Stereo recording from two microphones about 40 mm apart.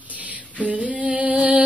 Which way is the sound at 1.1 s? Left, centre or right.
Right.